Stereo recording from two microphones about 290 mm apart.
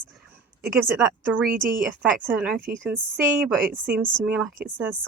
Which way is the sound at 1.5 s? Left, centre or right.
Right.